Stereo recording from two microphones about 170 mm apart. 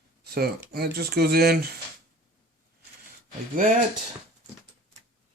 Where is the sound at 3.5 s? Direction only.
50° right (ahead or behind).